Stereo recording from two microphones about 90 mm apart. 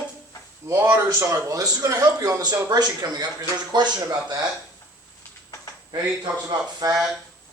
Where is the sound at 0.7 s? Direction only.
30° right (ahead or behind).